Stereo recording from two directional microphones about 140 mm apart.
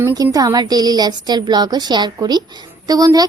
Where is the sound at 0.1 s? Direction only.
25° right (ahead or behind).